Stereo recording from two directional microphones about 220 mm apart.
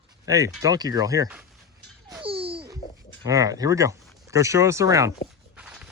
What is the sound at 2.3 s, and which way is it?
Babbling, 25° right (ahead or behind).